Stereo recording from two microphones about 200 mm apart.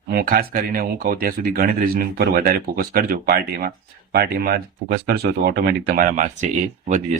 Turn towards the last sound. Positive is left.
turn(degrees=-40)  # may be behind; listen again after turning